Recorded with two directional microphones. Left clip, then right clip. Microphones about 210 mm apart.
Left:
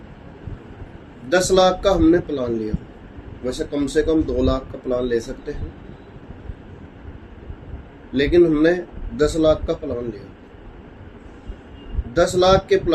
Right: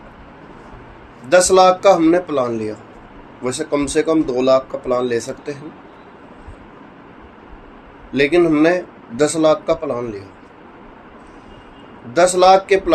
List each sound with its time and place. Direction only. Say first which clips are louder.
1.3 s speech: right 5 dB; 10° right (ahead or behind)
8.1 s speech: right 2 dB; 5° right (ahead or behind)
12.1 s speech: right 5 dB; 5° right (ahead or behind)